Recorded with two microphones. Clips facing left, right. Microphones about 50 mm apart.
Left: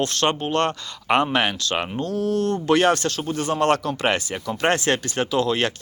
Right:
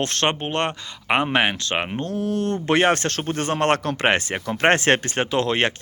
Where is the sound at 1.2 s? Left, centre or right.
Right.